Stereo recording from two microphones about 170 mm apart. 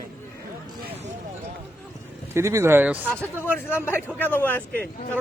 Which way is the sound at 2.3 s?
15° right (ahead or behind).